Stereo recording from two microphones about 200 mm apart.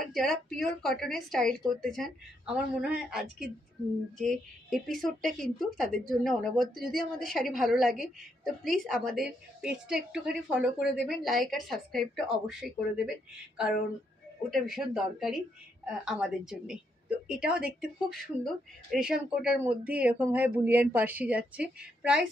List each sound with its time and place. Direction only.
0.0 s a woman's voice: centre (ahead or behind)
14.5 s a woman's voice: centre (ahead or behind)